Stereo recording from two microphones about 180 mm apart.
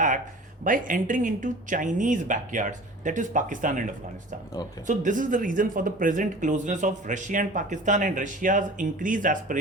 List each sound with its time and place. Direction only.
0.6 s speech: 50° right (ahead or behind)
4.9 s speech: 45° right (ahead or behind)